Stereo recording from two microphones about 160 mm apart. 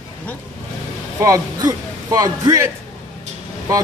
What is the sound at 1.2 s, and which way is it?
Speech, 20° right (ahead or behind).